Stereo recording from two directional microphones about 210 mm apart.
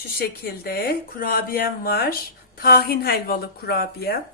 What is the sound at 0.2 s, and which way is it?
Speech, 45° left (ahead or behind).